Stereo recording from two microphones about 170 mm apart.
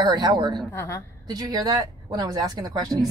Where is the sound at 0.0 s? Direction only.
25° right (ahead or behind).